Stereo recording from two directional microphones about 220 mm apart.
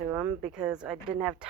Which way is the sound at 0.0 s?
10° right (ahead or behind).